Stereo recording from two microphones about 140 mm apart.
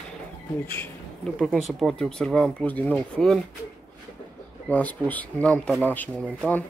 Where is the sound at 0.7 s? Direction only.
15° left (ahead or behind).